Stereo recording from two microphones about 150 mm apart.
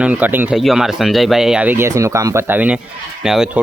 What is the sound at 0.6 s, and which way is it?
Speech, centre (ahead or behind).